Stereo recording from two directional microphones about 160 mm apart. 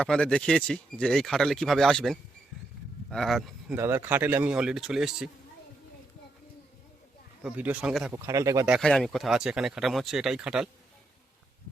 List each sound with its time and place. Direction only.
0.0 s speech: 5° left (ahead or behind)
3.8 s a man's voice: 15° right (ahead or behind)
7.4 s speech: 10° right (ahead or behind)
8.1 s speech: 20° right (ahead or behind)
8.8 s speech: 5° left (ahead or behind)